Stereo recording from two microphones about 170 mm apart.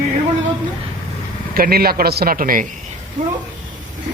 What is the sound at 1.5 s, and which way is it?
A man's voice, 60° right (ahead or behind).